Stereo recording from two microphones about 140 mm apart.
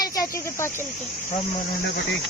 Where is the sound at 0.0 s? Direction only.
25° left (ahead or behind).